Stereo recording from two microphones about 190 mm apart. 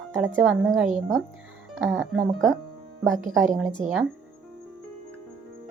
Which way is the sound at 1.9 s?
5° right (ahead or behind).